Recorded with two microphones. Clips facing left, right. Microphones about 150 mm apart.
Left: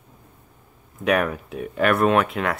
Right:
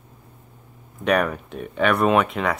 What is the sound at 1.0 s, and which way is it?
Speech, 5° left (ahead or behind).